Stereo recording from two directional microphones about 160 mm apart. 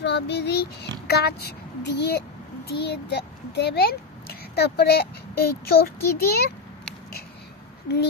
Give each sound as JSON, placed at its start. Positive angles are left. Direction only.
{"t": 0.0, "sound": "a child's voice", "side_deg": 90}